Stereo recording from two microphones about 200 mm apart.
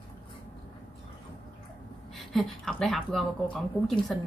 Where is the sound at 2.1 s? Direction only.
Centre (ahead or behind).